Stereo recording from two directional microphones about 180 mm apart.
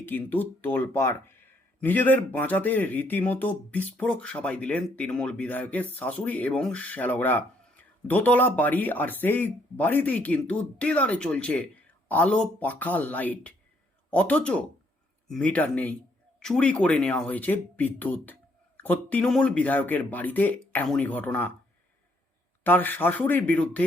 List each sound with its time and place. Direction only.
0.0 s speech: 10° left (ahead or behind)
22.6 s speech: 10° left (ahead or behind)